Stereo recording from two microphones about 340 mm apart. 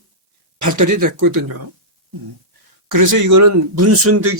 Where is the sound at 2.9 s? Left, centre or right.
Right.